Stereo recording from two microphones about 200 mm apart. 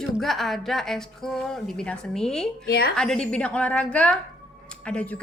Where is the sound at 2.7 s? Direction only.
55° left (ahead or behind).